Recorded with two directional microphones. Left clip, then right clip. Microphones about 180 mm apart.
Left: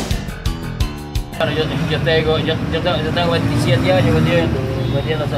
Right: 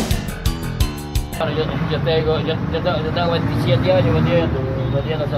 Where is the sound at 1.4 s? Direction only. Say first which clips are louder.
Left 3 dB; 10° left (ahead or behind).